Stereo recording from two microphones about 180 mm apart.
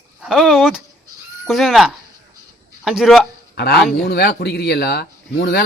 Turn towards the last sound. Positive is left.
turn(degrees=60)  # may be behind; listen again after turning